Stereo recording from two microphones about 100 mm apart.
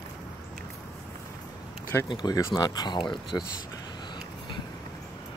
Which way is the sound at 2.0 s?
45° left (ahead or behind).